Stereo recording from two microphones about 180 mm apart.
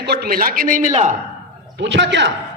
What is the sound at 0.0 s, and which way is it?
A man's voice, 60° right (ahead or behind).